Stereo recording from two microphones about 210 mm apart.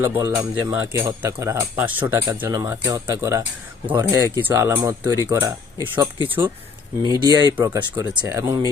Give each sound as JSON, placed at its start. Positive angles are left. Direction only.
{"t": 0.0, "sound": "speech", "side_deg": -15}
{"t": 7.0, "sound": "speech", "side_deg": -20}